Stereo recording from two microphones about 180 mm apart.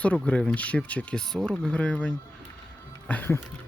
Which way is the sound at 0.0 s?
5° left (ahead or behind).